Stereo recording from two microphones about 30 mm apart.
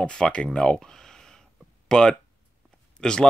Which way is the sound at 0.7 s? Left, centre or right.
Centre.